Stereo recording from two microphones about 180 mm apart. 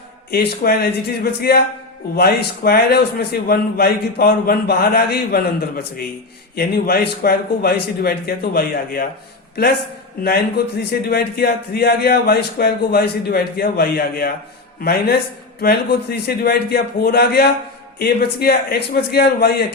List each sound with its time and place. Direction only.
0.3 s a man's voice: 60° left (ahead or behind)
10.2 s a man's voice: 60° left (ahead or behind)